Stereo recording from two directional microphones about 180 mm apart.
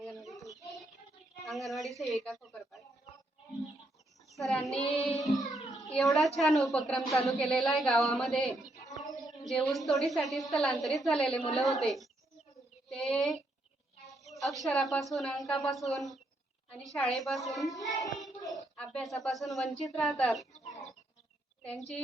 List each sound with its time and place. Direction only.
0.0 s child singing: centre (ahead or behind)
1.5 s a sound: centre (ahead or behind)
2.0 s speech: centre (ahead or behind)
4.4 s a woman's voice: centre (ahead or behind)
4.8 s child singing: 35° left (ahead or behind)
5.2 s music: centre (ahead or behind)
5.8 s a woman's voice: centre (ahead or behind)
12.9 s child singing: centre (ahead or behind)
14.6 s a woman's voice: centre (ahead or behind)
17.7 s child singing: 20° left (ahead or behind)
18.5 s a woman's voice: 5° left (ahead or behind)
21.6 s a woman's voice: 5° left (ahead or behind)